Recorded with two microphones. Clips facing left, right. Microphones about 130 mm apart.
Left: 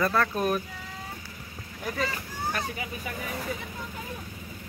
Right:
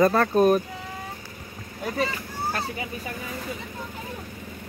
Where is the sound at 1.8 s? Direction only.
25° right (ahead or behind).